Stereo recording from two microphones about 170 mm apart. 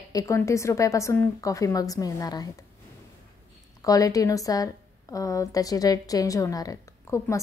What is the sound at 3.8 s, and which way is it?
A woman's voice, 20° left (ahead or behind).